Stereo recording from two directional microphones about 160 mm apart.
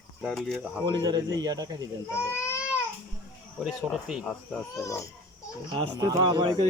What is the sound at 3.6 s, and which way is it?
Speech, 5° right (ahead or behind).